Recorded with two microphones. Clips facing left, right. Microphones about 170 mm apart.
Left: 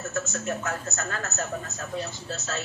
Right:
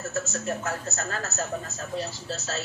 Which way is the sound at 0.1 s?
30° right (ahead or behind).